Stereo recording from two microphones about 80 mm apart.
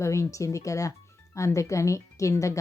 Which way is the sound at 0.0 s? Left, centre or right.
Left.